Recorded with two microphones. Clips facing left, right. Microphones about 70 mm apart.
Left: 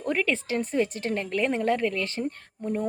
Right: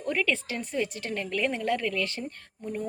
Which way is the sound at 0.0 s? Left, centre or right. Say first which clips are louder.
Left 2 dB; left.